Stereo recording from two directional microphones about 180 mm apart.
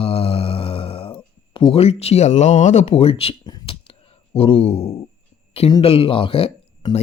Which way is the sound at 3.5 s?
30° left (ahead or behind).